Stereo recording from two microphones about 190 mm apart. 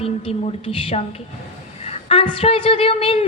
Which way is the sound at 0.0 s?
30° left (ahead or behind).